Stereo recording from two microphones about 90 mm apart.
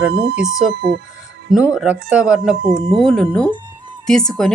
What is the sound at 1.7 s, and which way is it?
A woman's voice, 10° right (ahead or behind).